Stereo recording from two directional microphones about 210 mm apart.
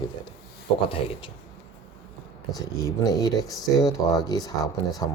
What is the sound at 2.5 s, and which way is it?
Speech, 20° left (ahead or behind).